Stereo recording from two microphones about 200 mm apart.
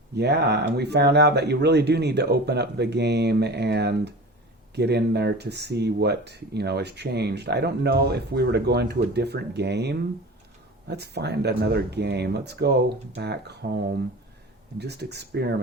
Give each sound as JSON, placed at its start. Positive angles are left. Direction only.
{"t": 0.2, "sound": "speech", "side_deg": -55}